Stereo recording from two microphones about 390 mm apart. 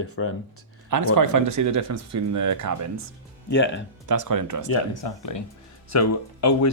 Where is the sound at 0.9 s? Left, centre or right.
Right.